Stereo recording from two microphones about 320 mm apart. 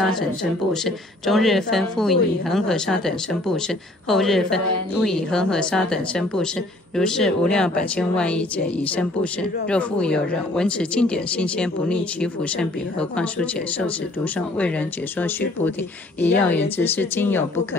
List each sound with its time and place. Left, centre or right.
0.0 s a woman's voice: centre